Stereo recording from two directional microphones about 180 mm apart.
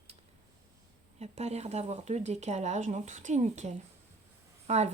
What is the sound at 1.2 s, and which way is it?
Speech, 35° right (ahead or behind).